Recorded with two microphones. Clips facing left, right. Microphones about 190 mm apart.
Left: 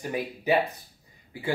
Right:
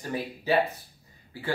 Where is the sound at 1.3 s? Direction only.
15° left (ahead or behind).